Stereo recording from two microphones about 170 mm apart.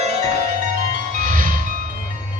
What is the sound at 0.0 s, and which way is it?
Music, 40° right (ahead or behind).